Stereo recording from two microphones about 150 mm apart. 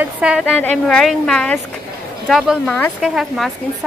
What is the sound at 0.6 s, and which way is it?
A woman's voice, 10° left (ahead or behind).